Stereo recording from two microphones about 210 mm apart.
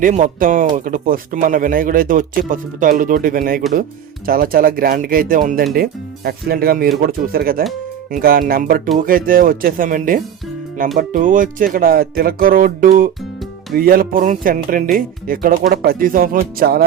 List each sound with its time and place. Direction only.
0.0 s speech: 40° right (ahead or behind)